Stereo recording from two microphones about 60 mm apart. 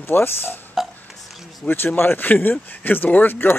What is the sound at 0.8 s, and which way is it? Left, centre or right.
Burping, centre.